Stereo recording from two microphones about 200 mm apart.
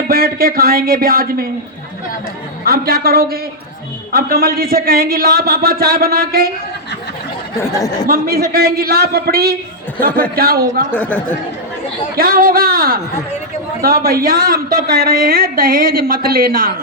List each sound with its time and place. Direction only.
0.1 s a woman's voice: 50° right (ahead or behind)
2.6 s a woman's voice: 50° right (ahead or behind)
7.6 s speech: 15° left (ahead or behind)
8.0 s a woman's voice: 50° right (ahead or behind)
10.9 s speech: 5° left (ahead or behind)
12.1 s a woman's voice: 45° right (ahead or behind)